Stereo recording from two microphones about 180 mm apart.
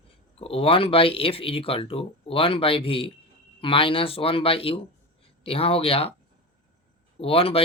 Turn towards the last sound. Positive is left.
turn(degrees=30)  # may be behind; listen again after turning